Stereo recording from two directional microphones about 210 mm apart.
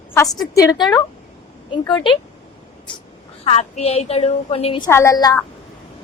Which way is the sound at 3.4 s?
30° left (ahead or behind).